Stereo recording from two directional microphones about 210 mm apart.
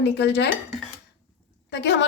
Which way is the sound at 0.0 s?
55° left (ahead or behind).